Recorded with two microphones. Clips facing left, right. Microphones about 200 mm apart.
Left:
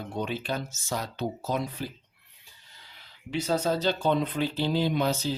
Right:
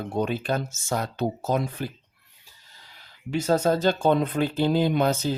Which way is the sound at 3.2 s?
45° right (ahead or behind).